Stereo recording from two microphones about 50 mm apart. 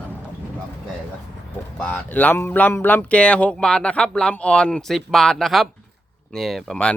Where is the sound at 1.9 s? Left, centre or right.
Left.